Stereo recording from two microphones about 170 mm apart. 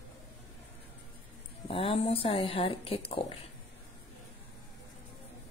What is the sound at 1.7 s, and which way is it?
Speech, 35° left (ahead or behind).